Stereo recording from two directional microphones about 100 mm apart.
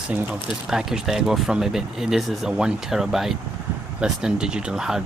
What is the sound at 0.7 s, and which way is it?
Speech, 5° right (ahead or behind).